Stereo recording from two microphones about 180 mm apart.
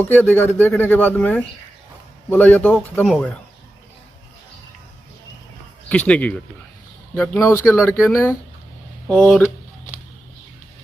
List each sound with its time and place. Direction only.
0.0 s speech: 10° left (ahead or behind)
5.9 s speech: 5° left (ahead or behind)